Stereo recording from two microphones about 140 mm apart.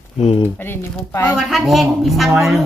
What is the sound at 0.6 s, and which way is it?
Speech, 15° left (ahead or behind).